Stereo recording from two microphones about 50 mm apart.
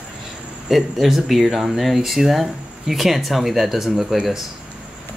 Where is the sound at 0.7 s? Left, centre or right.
Centre.